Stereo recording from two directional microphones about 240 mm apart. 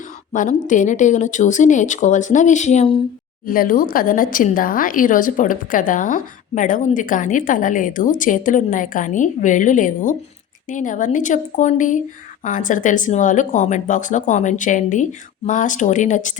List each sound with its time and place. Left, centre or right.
0.3 s speech: left
3.4 s speech: left